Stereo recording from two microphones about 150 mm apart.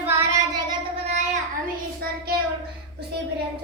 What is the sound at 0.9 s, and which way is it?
Child singing, 50° right (ahead or behind).